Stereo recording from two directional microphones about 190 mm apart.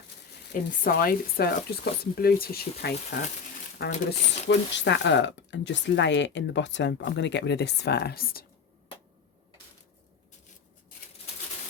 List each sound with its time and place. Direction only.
0.5 s speech: 45° left (ahead or behind)
4.4 s speech: 65° left (ahead or behind); by 8.4 s 50° left (ahead or behind)